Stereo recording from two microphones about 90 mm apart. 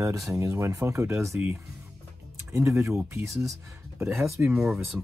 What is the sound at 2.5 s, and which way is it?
Speech, 30° right (ahead or behind).